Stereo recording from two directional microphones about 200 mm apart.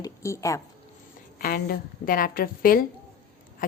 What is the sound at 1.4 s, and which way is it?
Speech, 45° left (ahead or behind).